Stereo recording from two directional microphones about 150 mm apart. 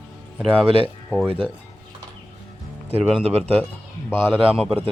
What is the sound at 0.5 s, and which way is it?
Speech, 40° right (ahead or behind).